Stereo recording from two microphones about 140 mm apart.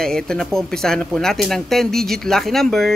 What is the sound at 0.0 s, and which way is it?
Speech, 5° left (ahead or behind).